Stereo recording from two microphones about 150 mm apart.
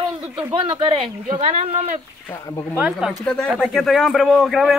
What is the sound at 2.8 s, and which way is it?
Speech, 5° right (ahead or behind).